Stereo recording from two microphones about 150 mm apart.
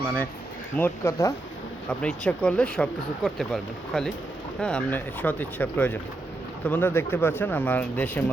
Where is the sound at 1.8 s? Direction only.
5° left (ahead or behind).